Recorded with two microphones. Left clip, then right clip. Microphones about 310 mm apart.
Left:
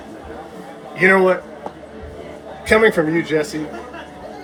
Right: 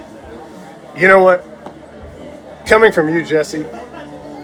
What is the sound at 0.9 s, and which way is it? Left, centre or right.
Speech, centre.